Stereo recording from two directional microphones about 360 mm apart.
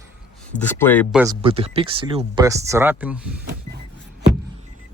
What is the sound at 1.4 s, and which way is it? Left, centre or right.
Speech, centre.